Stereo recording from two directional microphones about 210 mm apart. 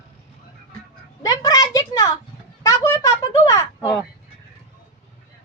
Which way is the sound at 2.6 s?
15° left (ahead or behind).